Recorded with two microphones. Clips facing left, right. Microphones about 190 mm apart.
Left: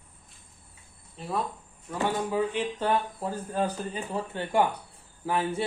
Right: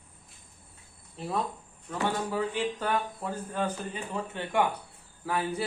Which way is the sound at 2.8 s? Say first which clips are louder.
Left 3 dB; 30° left (ahead or behind).